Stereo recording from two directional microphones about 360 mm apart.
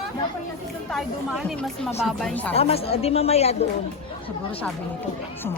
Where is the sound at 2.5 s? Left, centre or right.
Centre.